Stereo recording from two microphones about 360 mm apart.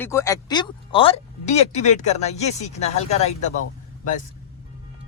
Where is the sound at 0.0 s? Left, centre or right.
Centre.